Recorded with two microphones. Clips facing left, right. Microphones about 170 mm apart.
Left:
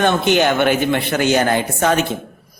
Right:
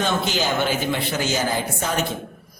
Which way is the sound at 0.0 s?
60° left (ahead or behind).